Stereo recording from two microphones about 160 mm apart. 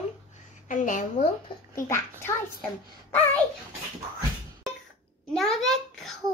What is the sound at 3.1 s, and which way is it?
Speech, 10° left (ahead or behind).